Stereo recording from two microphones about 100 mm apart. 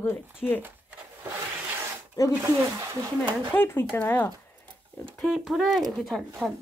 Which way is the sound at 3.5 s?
20° left (ahead or behind).